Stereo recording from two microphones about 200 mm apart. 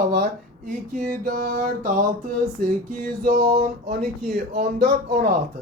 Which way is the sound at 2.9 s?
40° right (ahead or behind).